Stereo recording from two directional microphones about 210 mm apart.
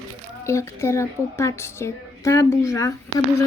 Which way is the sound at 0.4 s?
15° left (ahead or behind).